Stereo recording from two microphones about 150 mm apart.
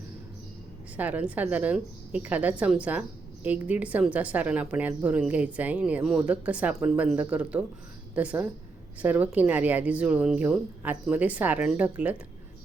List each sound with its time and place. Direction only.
0.9 s a woman's voice: 10° right (ahead or behind)